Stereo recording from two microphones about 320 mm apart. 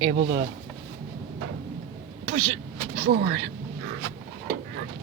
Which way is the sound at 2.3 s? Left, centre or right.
Right.